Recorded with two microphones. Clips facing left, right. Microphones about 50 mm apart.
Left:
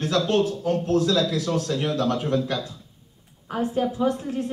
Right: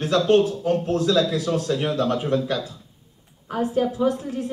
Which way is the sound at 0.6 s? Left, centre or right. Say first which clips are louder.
Even; right.